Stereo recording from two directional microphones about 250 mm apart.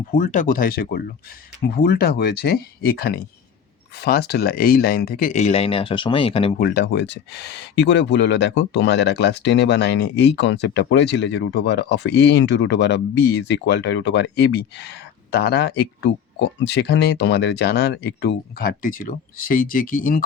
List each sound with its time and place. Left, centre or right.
0.1 s speech: left
6.6 s speech: left